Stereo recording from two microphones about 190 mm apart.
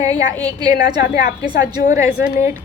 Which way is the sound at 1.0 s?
50° left (ahead or behind).